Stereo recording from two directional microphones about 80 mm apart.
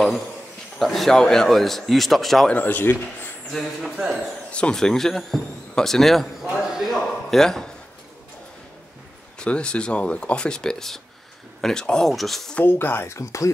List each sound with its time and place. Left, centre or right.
0.7 s speech: centre
2.5 s a man's voice: left
3.5 s speech: centre
4.5 s speech: centre
9.4 s speech: centre
12.5 s speech: left